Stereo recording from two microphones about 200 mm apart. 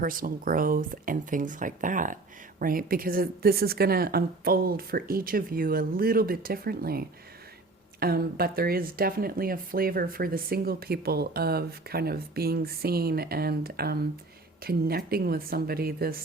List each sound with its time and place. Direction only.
0.0 s speech: 45° right (ahead or behind)